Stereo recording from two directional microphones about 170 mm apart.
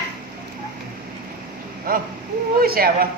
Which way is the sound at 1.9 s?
55° right (ahead or behind).